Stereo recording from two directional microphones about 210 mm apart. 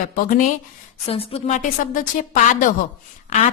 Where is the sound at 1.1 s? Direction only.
30° left (ahead or behind).